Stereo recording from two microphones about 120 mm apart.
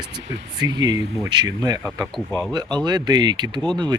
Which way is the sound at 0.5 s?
35° right (ahead or behind).